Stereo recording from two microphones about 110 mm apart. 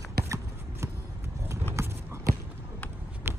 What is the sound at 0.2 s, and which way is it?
Shuffling cards, 25° right (ahead or behind).